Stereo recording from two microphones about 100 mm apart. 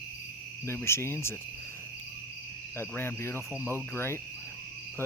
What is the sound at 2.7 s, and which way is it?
Cricket, 20° left (ahead or behind).